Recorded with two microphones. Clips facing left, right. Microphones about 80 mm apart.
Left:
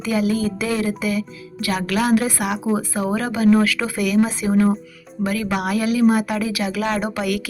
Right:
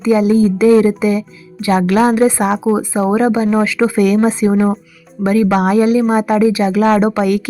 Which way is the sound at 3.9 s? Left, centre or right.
Right.